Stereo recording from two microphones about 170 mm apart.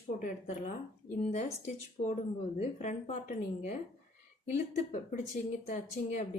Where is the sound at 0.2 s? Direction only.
40° left (ahead or behind).